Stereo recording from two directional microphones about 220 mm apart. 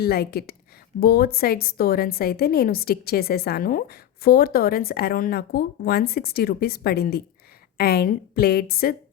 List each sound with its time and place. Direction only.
0.0 s a woman's voice: 45° left (ahead or behind)